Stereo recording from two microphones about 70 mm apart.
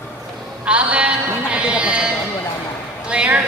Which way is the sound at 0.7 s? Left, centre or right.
Centre.